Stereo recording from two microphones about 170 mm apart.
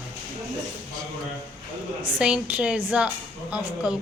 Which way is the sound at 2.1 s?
5° right (ahead or behind).